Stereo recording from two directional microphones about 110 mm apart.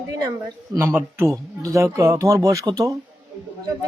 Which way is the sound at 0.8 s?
20° right (ahead or behind).